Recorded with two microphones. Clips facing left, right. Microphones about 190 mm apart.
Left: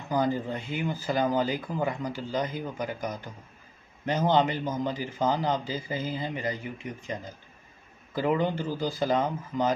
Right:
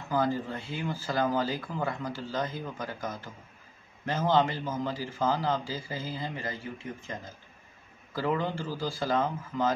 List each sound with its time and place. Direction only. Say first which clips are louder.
0.1 s a man's voice: left 2 dB; 15° left (ahead or behind)